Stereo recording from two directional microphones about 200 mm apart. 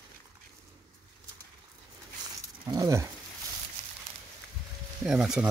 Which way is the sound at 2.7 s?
15° right (ahead or behind).